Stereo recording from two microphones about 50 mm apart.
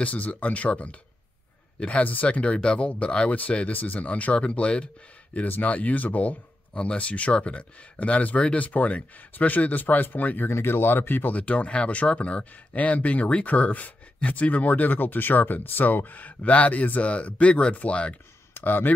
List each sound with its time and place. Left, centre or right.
0.0 s speech: left
10.5 s speech: left
11.3 s speech: left
18.5 s speech: left